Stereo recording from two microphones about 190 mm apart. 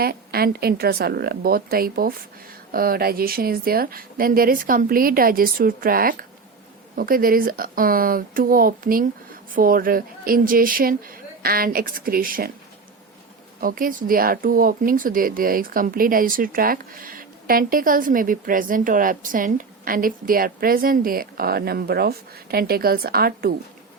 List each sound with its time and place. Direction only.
0.0 s speech: 55° right (ahead or behind)
13.6 s speech: 45° right (ahead or behind)